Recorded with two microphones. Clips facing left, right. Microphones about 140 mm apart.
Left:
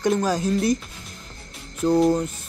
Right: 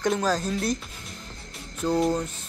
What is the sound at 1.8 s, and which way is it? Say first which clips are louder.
Speech: left 5 dB; 5° left (ahead or behind).